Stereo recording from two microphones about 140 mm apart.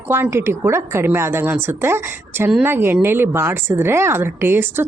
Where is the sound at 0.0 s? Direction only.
15° right (ahead or behind).